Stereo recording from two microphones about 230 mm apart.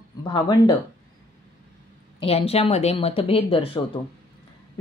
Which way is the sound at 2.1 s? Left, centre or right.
Left.